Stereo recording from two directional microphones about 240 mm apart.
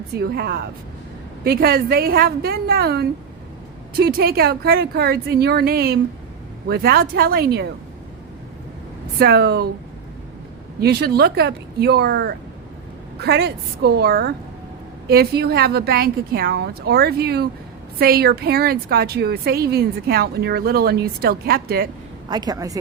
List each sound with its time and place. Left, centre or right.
0.1 s a woman's voice: right
9.1 s a woman's voice: right
10.8 s a woman's voice: right
22.3 s a woman's voice: centre